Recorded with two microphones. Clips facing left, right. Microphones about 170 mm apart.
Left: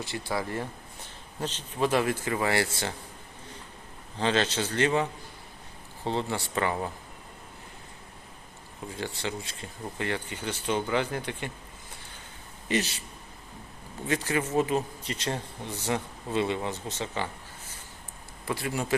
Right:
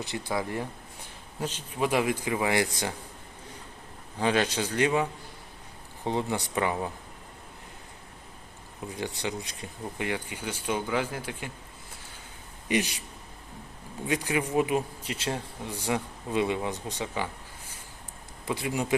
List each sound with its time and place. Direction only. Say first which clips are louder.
0.0 s speech: right 1 dB; 20° right (ahead or behind)
4.2 s speech: right 1 dB; 10° right (ahead or behind)
6.1 s speech: right 1 dB; 15° right (ahead or behind)
9.0 s speech: right 1 dB; 15° right (ahead or behind)
12.6 s a man's voice: right 1 dB; 15° right (ahead or behind)
14.1 s speech: even; 15° right (ahead or behind)
18.4 s speech: right 1 dB; 15° right (ahead or behind)